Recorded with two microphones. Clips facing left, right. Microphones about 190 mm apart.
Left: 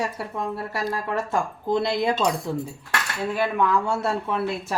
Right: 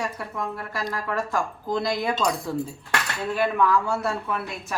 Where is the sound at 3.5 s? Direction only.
20° left (ahead or behind).